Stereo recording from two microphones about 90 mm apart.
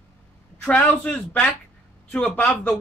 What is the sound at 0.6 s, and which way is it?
Speech, 15° left (ahead or behind).